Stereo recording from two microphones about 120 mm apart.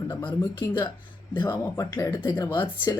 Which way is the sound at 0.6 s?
30° left (ahead or behind).